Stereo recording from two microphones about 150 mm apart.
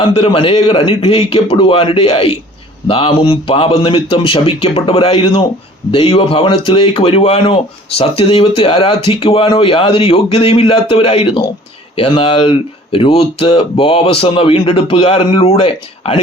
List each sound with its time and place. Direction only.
0.0 s speech: 40° left (ahead or behind)